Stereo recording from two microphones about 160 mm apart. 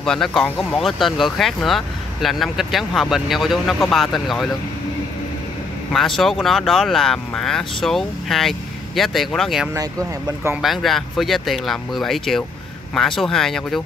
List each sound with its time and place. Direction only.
0.0 s speech: 5° left (ahead or behind)
5.9 s speech: centre (ahead or behind)